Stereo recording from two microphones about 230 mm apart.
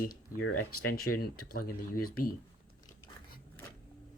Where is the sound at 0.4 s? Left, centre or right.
Left.